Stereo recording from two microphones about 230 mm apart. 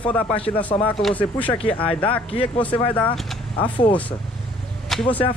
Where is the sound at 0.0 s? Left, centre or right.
Centre.